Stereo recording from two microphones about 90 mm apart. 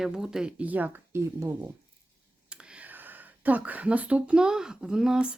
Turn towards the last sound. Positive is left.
turn(degrees=-10)  # may be behind; listen again after turning